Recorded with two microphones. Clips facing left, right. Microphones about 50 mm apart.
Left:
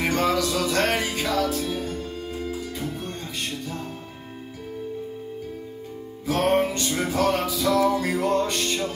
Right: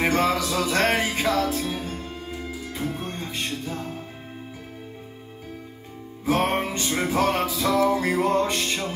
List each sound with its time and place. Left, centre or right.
0.0 s music: right
6.2 s music: right